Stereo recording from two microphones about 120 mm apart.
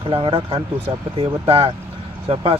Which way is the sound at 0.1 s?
50° right (ahead or behind).